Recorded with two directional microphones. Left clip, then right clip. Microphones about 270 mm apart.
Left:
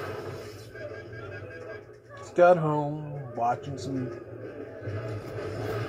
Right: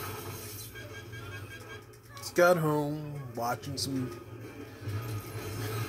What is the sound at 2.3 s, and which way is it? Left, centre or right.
Speech, right.